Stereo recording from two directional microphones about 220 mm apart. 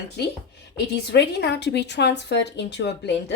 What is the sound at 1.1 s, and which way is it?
Speech, 50° left (ahead or behind).